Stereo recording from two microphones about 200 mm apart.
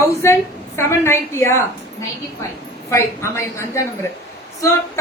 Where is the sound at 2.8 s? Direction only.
15° left (ahead or behind).